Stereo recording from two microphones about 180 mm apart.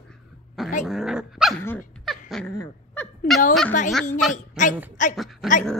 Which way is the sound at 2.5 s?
10° left (ahead or behind).